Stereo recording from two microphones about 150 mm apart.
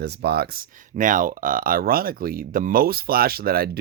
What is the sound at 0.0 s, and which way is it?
Speech, 90° right.